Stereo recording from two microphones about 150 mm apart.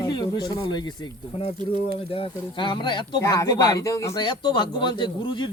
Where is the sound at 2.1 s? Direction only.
35° left (ahead or behind).